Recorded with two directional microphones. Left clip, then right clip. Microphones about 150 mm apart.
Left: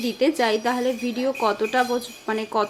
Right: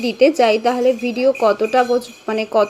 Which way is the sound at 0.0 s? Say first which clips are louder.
Right 8 dB; 15° right (ahead or behind).